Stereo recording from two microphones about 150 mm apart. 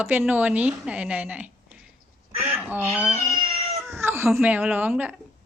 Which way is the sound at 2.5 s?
10° right (ahead or behind).